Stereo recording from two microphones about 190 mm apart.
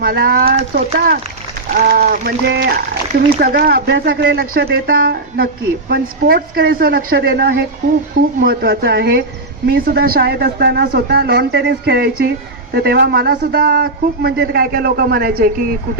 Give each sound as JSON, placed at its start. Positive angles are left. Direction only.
{"t": 0.0, "sound": "a man's voice", "side_deg": -50}